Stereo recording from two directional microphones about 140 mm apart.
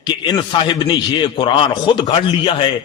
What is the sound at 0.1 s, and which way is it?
A man's voice, 35° left (ahead or behind).